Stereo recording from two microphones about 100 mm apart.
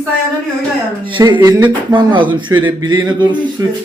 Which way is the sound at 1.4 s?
25° right (ahead or behind).